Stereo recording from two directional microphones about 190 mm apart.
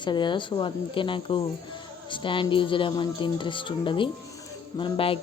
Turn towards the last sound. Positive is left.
turn(degrees=30)  # may be behind; listen again after turning